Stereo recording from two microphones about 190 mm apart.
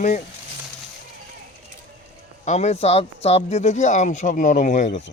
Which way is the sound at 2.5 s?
35° left (ahead or behind).